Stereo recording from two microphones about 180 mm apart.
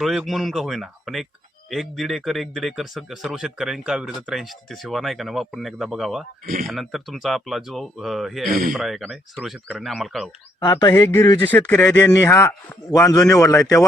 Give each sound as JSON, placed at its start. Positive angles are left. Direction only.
{"t": 0.0, "sound": "speech", "side_deg": 0}
{"t": 6.4, "sound": "speech", "side_deg": -50}
{"t": 6.7, "sound": "speech", "side_deg": 0}
{"t": 10.6, "sound": "a man's voice", "side_deg": 20}